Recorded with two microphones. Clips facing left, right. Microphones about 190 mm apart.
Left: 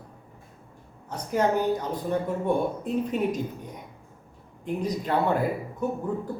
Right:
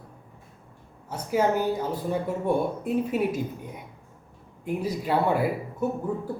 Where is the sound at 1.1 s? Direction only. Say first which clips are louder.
Right 1 dB; 5° right (ahead or behind).